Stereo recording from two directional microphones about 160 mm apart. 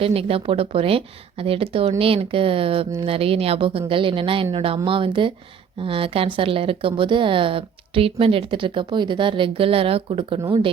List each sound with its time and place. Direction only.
0.0 s speech: 35° right (ahead or behind)